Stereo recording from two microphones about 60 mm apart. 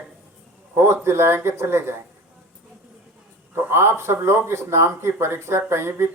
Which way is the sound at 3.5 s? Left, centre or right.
Right.